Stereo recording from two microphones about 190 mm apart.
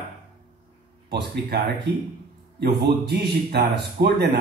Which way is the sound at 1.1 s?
60° right (ahead or behind).